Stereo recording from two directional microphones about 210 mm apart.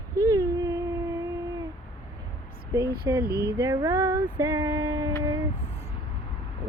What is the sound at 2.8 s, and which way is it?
Speech, 45° right (ahead or behind).